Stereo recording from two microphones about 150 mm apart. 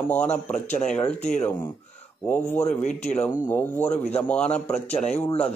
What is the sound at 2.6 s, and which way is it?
Speech, 50° left (ahead or behind).